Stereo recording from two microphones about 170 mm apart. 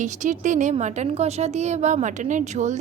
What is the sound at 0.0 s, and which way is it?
A woman's voice, 45° right (ahead or behind).